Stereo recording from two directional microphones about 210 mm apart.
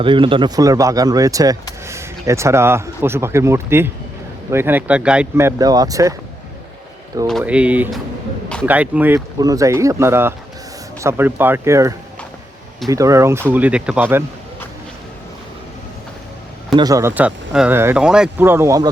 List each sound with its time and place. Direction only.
0.0 s speech: 25° right (ahead or behind)
7.3 s speech: centre (ahead or behind)
16.7 s speech: 15° right (ahead or behind)